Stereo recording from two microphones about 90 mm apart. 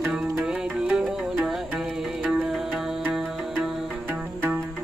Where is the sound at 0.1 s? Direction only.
5° right (ahead or behind).